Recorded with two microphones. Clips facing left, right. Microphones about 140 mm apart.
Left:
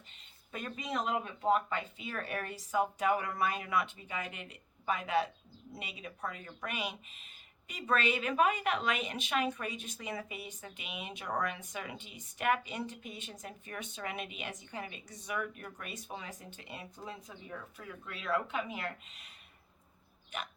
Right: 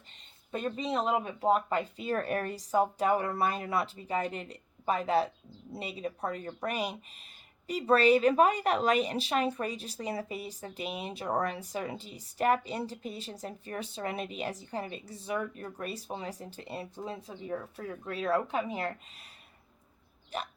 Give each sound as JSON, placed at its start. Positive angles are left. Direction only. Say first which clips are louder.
{"t": 0.5, "sound": "a woman's voice", "louder": "right 6 dB", "side_deg": -30}
{"t": 20.3, "sound": "a woman's voice", "louder": "right 5 dB", "side_deg": -35}